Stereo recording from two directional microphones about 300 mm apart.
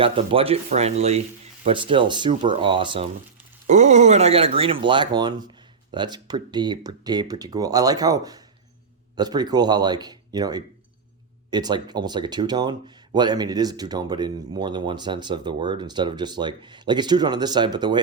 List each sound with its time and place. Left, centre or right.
0.0 s speech: centre